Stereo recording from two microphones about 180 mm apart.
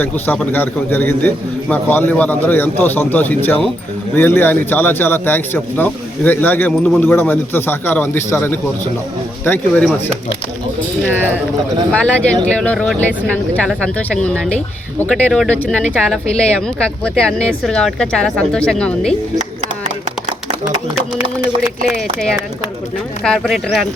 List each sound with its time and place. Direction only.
0.0 s a man's voice: 10° left (ahead or behind)
11.9 s a man's voice: 5° left (ahead or behind)
19.4 s a sound: 45° right (ahead or behind)
23.2 s speech: centre (ahead or behind)